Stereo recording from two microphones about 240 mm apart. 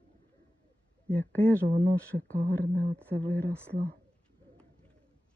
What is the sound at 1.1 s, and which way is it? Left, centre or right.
Speech, centre.